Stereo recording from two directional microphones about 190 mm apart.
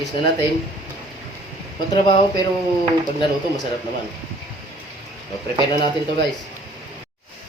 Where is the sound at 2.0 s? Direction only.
25° left (ahead or behind).